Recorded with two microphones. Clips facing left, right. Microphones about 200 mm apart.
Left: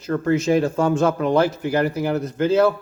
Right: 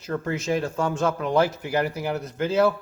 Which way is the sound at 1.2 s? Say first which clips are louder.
Left 4 dB; 5° right (ahead or behind).